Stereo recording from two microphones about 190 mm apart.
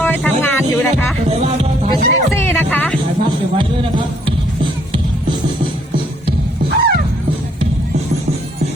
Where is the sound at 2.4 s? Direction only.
10° left (ahead or behind).